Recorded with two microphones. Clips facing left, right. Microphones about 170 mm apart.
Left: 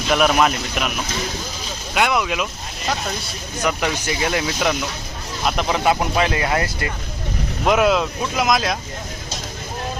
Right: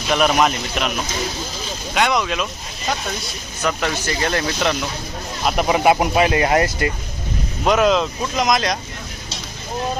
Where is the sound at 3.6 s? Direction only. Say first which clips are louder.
Even; 15° left (ahead or behind).